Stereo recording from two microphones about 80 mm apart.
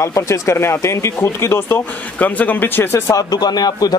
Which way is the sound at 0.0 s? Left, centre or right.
Left.